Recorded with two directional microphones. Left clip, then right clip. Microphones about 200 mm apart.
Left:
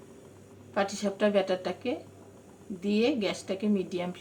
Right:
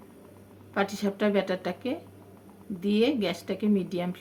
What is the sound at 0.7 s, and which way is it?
Speech, 25° right (ahead or behind).